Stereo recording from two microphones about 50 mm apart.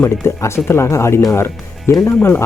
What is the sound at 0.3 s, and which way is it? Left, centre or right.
Speech, left.